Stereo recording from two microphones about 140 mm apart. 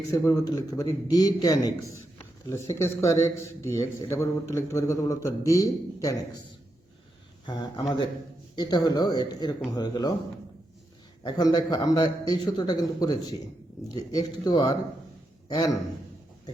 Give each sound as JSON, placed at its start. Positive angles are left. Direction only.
{"t": 0.1, "sound": "a man's voice", "side_deg": 25}
{"t": 7.4, "sound": "a man's voice", "side_deg": 30}
{"t": 11.2, "sound": "a man's voice", "side_deg": 30}